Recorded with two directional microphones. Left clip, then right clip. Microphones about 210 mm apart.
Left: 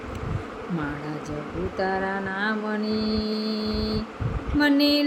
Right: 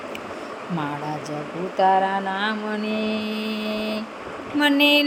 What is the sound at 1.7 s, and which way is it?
Child singing, 15° left (ahead or behind).